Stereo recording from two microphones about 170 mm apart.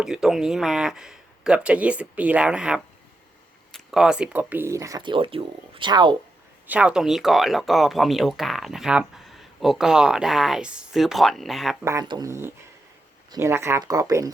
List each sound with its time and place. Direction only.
0.0 s speech: 5° right (ahead or behind); by 6.1 s 25° right (ahead or behind)
6.7 s speech: 5° right (ahead or behind)
11.9 s speech: 20° right (ahead or behind)